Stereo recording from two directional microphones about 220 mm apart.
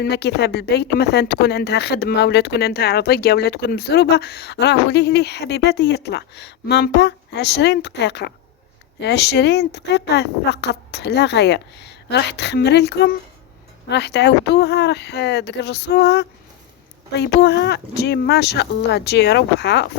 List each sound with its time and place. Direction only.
0.0 s speech: 50° left (ahead or behind)